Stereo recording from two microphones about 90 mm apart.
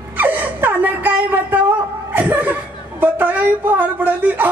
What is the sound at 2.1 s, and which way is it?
Speech, 20° right (ahead or behind).